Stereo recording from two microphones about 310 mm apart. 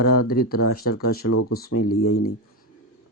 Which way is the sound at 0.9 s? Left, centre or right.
Left.